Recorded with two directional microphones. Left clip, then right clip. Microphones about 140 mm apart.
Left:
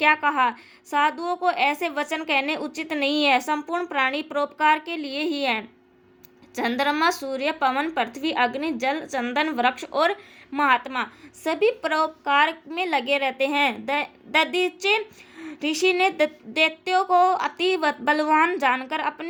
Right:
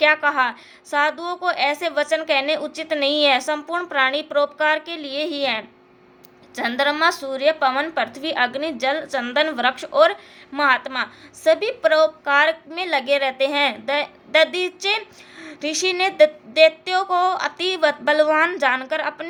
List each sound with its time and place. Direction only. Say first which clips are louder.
0.0 s a woman's voice: right 2 dB; 45° left (ahead or behind)